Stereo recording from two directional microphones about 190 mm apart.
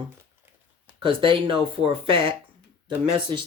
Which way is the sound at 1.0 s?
25° right (ahead or behind).